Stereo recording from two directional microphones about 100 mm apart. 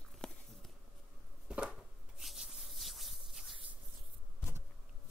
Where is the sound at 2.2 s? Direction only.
Centre (ahead or behind).